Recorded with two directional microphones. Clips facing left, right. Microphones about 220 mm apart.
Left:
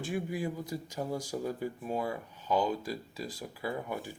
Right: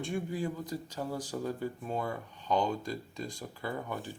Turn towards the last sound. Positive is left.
turn(degrees=10)  # may be behind; listen again after turning